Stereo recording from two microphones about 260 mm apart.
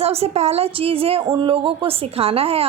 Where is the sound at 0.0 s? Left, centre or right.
Right.